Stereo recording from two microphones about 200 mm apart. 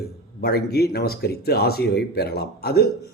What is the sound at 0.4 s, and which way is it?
Speech, 50° left (ahead or behind).